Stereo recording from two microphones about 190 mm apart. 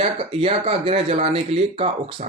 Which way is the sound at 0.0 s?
30° right (ahead or behind).